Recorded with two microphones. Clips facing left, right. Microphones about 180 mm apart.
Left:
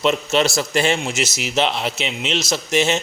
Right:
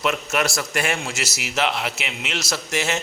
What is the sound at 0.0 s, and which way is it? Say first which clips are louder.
A man's voice: left 5 dB; 25° left (ahead or behind).